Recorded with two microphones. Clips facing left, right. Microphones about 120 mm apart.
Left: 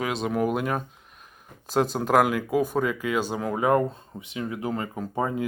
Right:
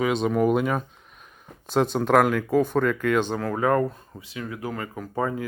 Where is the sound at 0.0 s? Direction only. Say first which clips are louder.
Right 4 dB; centre (ahead or behind).